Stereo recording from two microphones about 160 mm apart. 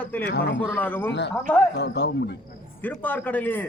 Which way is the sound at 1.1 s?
90° left.